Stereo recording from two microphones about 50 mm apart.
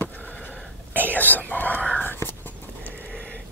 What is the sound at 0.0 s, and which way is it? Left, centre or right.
Sniff, left.